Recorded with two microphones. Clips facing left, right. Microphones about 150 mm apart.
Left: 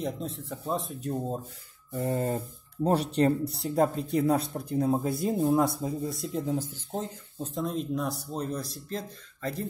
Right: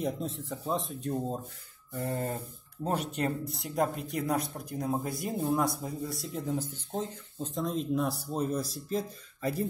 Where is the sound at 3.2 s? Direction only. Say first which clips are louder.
Left 7 dB; 30° left (ahead or behind); by 9.7 s 10° right (ahead or behind).